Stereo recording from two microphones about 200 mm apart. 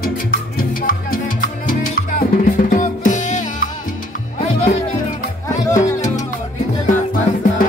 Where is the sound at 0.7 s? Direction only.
45° left (ahead or behind).